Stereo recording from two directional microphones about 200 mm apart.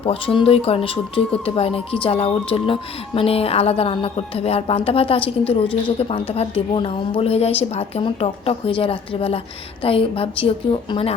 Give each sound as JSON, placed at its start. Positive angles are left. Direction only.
{"t": 0.0, "sound": "a woman's voice", "side_deg": 30}